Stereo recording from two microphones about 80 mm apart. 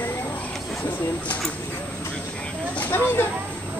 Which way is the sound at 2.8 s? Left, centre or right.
Left.